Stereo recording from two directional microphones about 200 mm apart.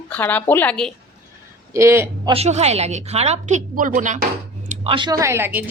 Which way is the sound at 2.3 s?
30° right (ahead or behind).